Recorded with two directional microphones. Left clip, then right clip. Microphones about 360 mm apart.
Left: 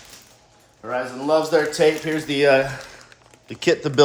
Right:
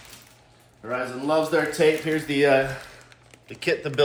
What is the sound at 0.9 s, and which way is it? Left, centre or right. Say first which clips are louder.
Speech: left 4 dB; left.